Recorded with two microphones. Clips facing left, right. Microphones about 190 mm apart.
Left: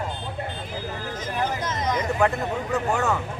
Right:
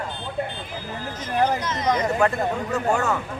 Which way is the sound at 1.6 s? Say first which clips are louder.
Right 3 dB; 50° left (ahead or behind).